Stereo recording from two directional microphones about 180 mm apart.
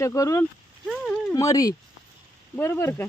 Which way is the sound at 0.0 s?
15° left (ahead or behind).